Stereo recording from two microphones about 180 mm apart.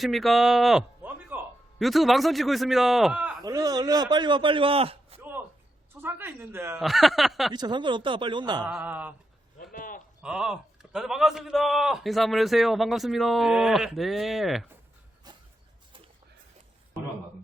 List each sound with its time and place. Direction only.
0.0 s a man's voice: centre (ahead or behind)
3.4 s a man's voice: 20° right (ahead or behind)
5.9 s speech: 10° right (ahead or behind)
6.7 s a man's voice: centre (ahead or behind)
7.5 s a man's voice: 25° right (ahead or behind)
8.6 s speech: 10° right (ahead or behind)
9.7 s a sound: 50° left (ahead or behind)
10.2 s a man's voice: 5° right (ahead or behind)
15.3 s a sound: 20° right (ahead or behind)